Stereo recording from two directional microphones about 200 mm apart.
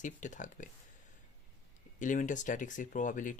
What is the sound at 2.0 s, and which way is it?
Speech, 40° left (ahead or behind).